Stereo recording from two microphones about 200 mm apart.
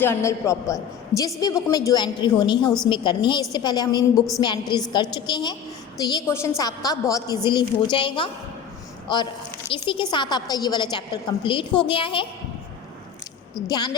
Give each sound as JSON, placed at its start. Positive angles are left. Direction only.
{"t": 0.0, "sound": "a man's voice", "side_deg": 15}
{"t": 13.7, "sound": "a woman's voice", "side_deg": 20}